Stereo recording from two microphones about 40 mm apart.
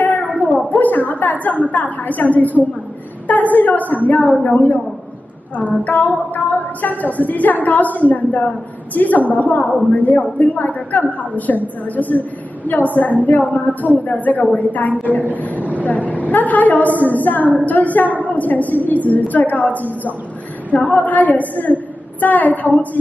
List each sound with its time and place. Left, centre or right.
0.7 s a woman's voice: left